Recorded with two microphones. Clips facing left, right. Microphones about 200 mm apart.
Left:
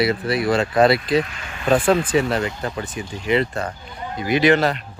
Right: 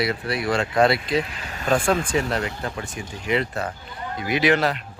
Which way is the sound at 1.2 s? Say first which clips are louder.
Left 2 dB; 35° right (ahead or behind).